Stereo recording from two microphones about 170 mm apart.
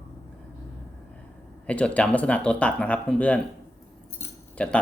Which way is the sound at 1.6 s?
5° left (ahead or behind).